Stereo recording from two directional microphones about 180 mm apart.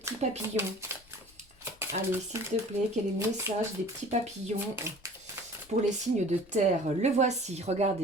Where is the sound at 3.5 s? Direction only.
15° right (ahead or behind).